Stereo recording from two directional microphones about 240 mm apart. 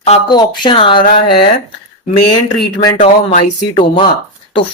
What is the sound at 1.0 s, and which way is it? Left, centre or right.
Speech, left.